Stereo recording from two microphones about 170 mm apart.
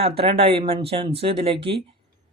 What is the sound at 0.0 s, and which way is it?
Speech, 35° right (ahead or behind).